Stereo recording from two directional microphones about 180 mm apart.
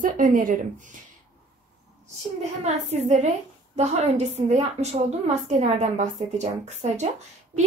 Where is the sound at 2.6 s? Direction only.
40° right (ahead or behind).